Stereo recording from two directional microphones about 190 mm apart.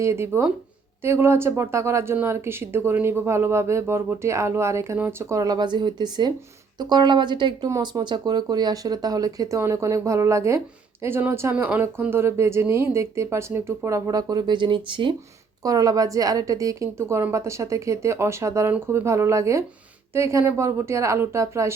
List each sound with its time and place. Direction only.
0.0 s speech: 15° right (ahead or behind)